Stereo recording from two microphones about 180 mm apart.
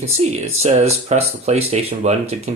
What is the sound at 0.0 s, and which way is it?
Speech, 35° right (ahead or behind).